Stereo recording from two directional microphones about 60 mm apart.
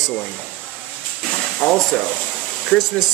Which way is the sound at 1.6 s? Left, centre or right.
Centre.